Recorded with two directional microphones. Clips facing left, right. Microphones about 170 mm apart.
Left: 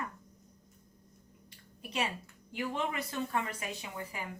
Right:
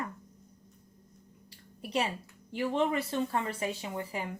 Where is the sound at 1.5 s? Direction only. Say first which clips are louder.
Right 7 dB; 30° right (ahead or behind).